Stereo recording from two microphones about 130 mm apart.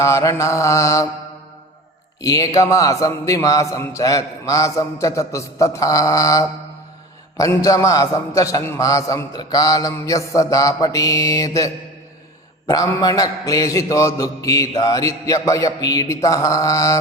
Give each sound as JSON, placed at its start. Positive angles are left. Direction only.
{"t": 0.0, "sound": "a man's voice", "side_deg": 25}
{"t": 2.2, "sound": "a man's voice", "side_deg": 25}